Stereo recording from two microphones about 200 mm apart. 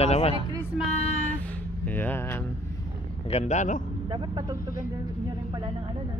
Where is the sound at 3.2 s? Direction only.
35° left (ahead or behind).